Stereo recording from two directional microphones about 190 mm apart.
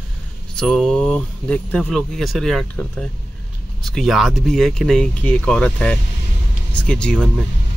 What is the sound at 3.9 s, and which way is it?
Speech, centre (ahead or behind).